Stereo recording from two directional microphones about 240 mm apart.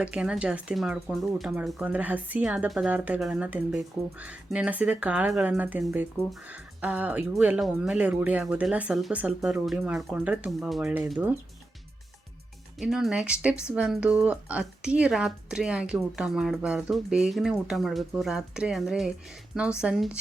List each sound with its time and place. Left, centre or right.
0.0 s speech: centre
12.8 s speech: centre